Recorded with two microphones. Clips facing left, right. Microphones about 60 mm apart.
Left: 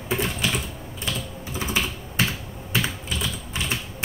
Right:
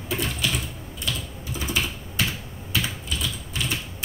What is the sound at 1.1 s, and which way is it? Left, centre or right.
Typing, left.